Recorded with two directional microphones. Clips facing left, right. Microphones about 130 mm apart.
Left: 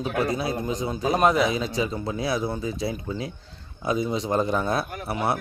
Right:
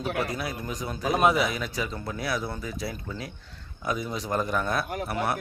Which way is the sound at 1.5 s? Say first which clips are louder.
Left 6 dB; 25° left (ahead or behind).